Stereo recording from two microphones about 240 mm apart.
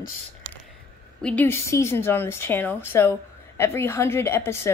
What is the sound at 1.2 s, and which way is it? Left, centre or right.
Speech, centre.